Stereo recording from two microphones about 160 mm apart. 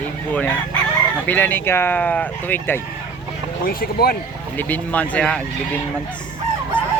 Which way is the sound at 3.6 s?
65° left (ahead or behind).